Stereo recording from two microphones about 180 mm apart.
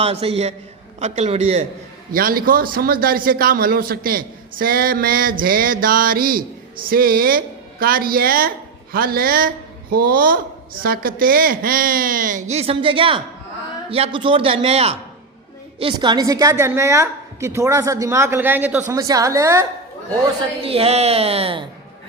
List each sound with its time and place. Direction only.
0.0 s a man's voice: 35° right (ahead or behind)
2.1 s a man's voice: 55° right (ahead or behind); by 19.6 s 15° right (ahead or behind)
20.6 s a man's voice: 35° right (ahead or behind)